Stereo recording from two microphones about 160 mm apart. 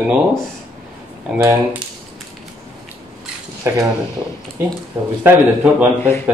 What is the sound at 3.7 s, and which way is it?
Speech, 20° right (ahead or behind).